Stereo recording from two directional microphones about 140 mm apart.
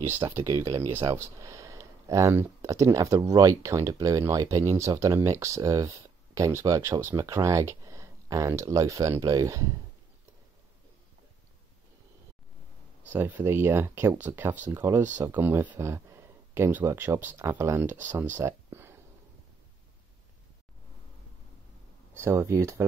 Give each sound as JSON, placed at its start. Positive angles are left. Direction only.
{"t": 0.3, "sound": "speech", "side_deg": -20}
{"t": 13.1, "sound": "speech", "side_deg": -15}
{"t": 22.1, "sound": "speech", "side_deg": -20}